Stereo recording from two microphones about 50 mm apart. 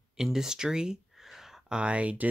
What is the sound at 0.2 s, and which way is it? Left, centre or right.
Speech, centre.